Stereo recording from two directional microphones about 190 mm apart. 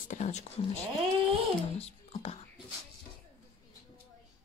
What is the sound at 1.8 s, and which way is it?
Speech, 35° left (ahead or behind).